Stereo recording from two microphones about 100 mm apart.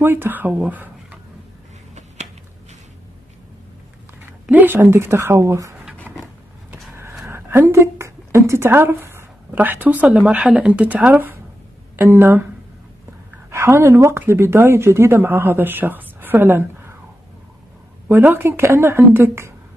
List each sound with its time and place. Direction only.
0.0 s speech: 20° right (ahead or behind)
4.5 s speech: 20° right (ahead or behind)
6.7 s vehicle: 25° right (ahead or behind)
7.2 s a woman's voice: 25° right (ahead or behind)
13.5 s speech: 25° right (ahead or behind)
18.0 s speech: 20° right (ahead or behind)